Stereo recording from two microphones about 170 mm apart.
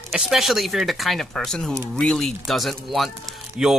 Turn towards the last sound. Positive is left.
turn(degrees=0)  # may be behind; listen again after turning